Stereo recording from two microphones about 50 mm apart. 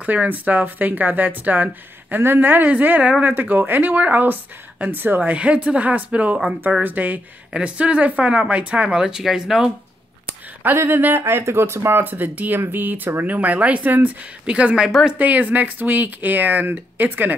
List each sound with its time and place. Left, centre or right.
0.0 s speech: right
5.3 s speech: right
7.5 s speech: right
8.9 s speech: centre
10.8 s speech: right
11.2 s speech: right
14.4 s speech: right